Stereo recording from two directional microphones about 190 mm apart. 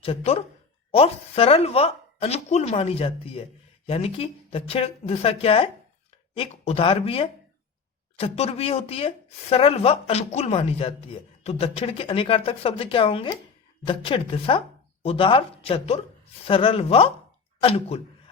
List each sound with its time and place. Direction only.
0.0 s speech: 30° left (ahead or behind)